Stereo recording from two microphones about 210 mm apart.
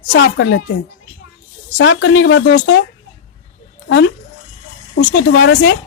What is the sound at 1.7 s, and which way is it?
Speech, 65° left (ahead or behind).